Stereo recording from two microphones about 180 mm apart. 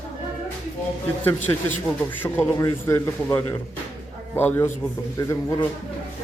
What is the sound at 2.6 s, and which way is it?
Speech, 15° left (ahead or behind).